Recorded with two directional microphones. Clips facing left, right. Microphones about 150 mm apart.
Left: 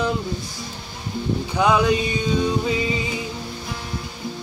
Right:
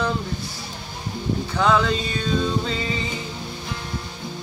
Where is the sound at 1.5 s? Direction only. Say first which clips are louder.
Left 2 dB; 15° left (ahead or behind).